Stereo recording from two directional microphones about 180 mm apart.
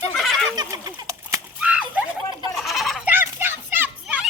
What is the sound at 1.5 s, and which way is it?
Turkey, 5° right (ahead or behind).